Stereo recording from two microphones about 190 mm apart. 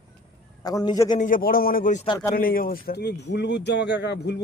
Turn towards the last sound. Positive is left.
turn(degrees=60)  # may be behind; listen again after turning